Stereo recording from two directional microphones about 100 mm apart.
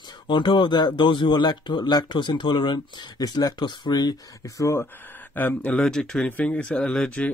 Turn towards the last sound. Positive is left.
turn(degrees=10)  # may be behind; listen again after turning